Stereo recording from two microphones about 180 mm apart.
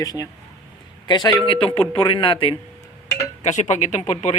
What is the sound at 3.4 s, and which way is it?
Speech, 40° left (ahead or behind).